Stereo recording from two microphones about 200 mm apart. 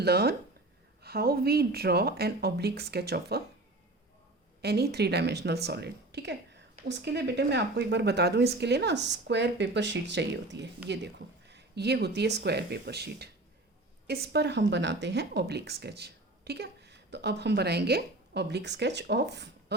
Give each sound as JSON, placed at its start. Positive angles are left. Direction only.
{"t": 0.0, "sound": "speech", "side_deg": -50}
{"t": 4.6, "sound": "a woman's voice", "side_deg": -55}